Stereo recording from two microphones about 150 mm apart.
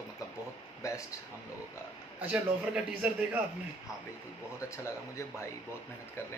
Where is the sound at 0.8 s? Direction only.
20° left (ahead or behind).